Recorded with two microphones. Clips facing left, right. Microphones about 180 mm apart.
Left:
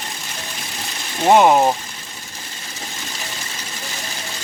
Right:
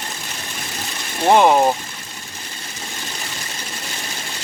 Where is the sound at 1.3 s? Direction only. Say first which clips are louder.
Left 1 dB; 5° left (ahead or behind).